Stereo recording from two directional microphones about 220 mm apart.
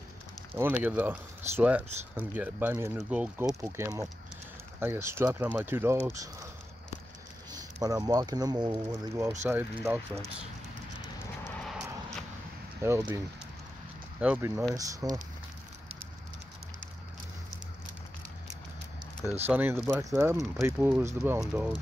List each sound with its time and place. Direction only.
0.6 s speech: 10° right (ahead or behind)
7.5 s speech: 15° right (ahead or behind)
11.4 s vehicle: 5° left (ahead or behind)
12.8 s speech: 10° right (ahead or behind)
14.2 s speech: 10° right (ahead or behind)
19.4 s speech: 10° right (ahead or behind)